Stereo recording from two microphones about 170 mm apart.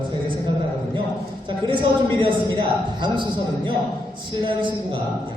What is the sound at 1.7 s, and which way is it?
A man's voice, 30° right (ahead or behind).